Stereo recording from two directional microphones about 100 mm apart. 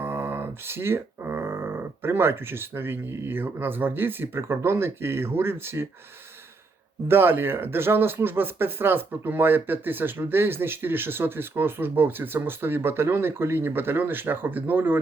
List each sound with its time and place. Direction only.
0.0 s speech: 25° right (ahead or behind)
7.1 s speech: 20° right (ahead or behind)